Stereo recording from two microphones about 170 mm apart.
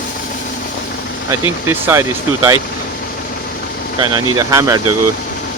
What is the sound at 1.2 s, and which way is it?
Speech, 15° right (ahead or behind).